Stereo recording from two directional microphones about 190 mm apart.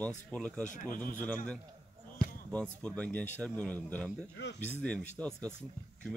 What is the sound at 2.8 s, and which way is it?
Speech, 5° left (ahead or behind).